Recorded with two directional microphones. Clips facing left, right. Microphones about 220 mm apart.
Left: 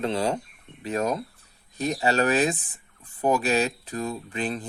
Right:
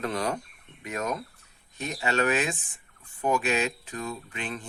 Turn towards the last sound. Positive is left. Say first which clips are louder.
# left 6 dB
turn(degrees=35)  # may be behind; listen again after turning